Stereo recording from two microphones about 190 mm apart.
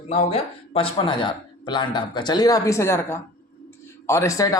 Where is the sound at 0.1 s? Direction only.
35° left (ahead or behind).